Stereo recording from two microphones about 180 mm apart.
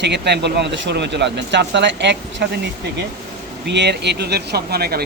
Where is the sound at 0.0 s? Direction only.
70° right (ahead or behind).